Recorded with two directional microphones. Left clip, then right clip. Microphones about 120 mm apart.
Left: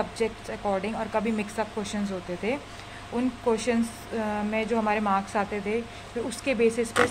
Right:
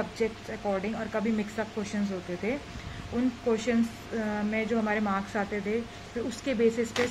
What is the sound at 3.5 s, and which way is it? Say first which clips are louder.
Speech: left 1 dB; 25° right (ahead or behind).